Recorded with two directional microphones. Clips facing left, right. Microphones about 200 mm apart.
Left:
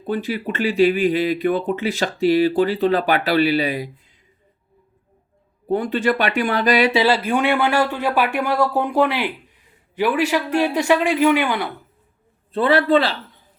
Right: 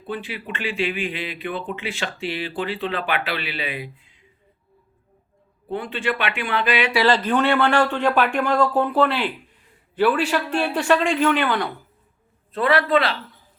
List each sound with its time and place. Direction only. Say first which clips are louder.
0.0 s speech: left 7 dB; 40° left (ahead or behind)
5.6 s speech: left 6 dB; 40° left (ahead or behind)
6.9 s speech: left 1 dB; 10° left (ahead or behind)
12.5 s speech: left 3 dB; 30° left (ahead or behind)